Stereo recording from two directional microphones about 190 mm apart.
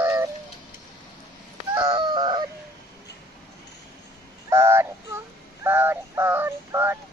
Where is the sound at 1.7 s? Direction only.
25° right (ahead or behind).